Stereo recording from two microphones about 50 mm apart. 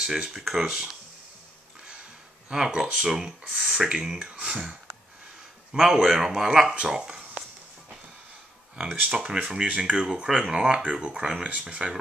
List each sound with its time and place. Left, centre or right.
0.0 s speech: centre
2.5 s speech: centre
5.7 s speech: centre
9.0 s speech: centre